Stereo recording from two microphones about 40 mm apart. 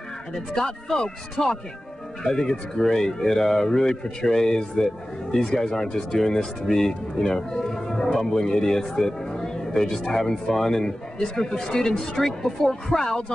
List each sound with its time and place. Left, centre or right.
0.3 s speech: centre
8.4 s speech: centre